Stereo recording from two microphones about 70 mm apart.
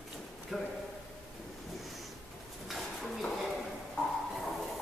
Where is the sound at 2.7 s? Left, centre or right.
Centre.